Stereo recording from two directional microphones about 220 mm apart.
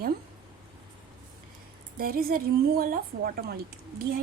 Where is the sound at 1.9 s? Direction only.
40° right (ahead or behind).